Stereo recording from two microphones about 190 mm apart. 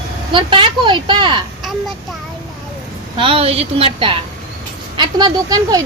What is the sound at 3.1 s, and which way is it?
A woman's voice, 30° right (ahead or behind).